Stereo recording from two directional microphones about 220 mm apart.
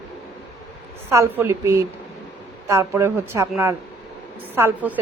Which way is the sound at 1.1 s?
10° right (ahead or behind).